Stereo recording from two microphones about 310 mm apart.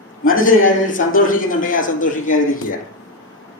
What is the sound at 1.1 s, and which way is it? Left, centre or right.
Speech, left.